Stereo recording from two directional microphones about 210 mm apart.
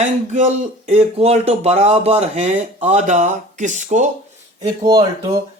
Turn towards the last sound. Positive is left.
turn(degrees=-20)  # may be behind; listen again after turning